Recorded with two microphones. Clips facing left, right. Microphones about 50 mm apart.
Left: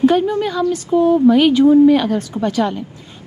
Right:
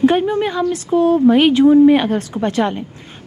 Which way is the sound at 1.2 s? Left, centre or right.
Right.